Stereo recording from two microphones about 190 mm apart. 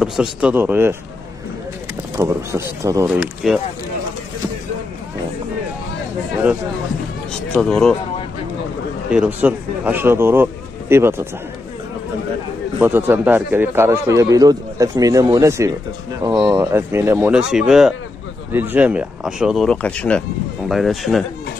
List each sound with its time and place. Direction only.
0.0 s a man's voice: 5° right (ahead or behind)
2.1 s a man's voice: 15° right (ahead or behind)
3.1 s speech: 5° right (ahead or behind)
7.6 s speech: centre (ahead or behind)
9.1 s a man's voice: 5° right (ahead or behind)
12.8 s a man's voice: 10° right (ahead or behind)